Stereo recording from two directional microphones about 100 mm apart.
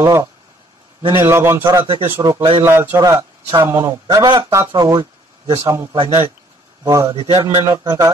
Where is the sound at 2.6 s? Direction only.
30° right (ahead or behind).